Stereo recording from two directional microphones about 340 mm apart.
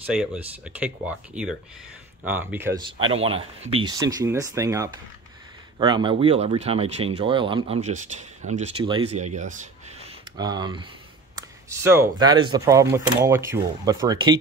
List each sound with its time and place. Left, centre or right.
0.0 s speech: centre